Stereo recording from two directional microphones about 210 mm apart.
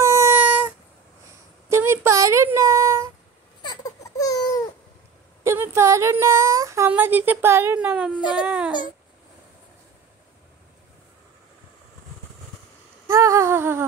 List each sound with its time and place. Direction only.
0.0 s cat: 10° right (ahead or behind)
1.7 s child singing: 10° right (ahead or behind)
3.6 s baby cry: 20° left (ahead or behind)
5.4 s a sound: 10° right (ahead or behind)
8.4 s speech: 5° right (ahead or behind)
13.1 s a sound: 15° right (ahead or behind)